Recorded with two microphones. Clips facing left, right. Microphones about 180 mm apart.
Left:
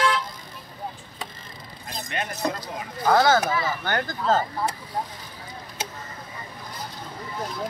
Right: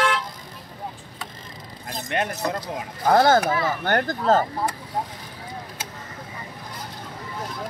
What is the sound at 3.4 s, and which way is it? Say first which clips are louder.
Speech: right 3 dB; 55° right (ahead or behind).